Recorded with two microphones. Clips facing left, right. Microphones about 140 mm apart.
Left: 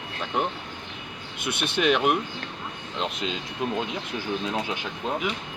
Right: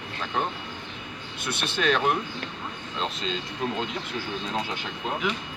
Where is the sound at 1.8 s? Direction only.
10° left (ahead or behind).